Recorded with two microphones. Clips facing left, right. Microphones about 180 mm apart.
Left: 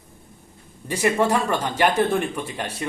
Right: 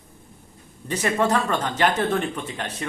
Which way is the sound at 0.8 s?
10° left (ahead or behind).